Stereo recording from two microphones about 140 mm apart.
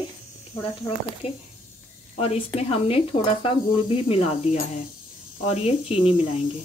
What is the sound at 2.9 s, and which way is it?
Speech, 40° left (ahead or behind).